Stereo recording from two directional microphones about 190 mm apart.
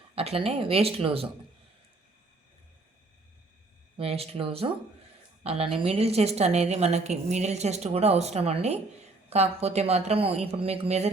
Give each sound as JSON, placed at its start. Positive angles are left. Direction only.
{"t": 0.2, "sound": "a woman's voice", "side_deg": -30}
{"t": 3.9, "sound": "a woman's voice", "side_deg": -30}